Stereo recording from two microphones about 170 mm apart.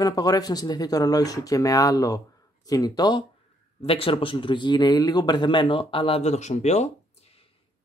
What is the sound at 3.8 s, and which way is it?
Speech, 35° left (ahead or behind).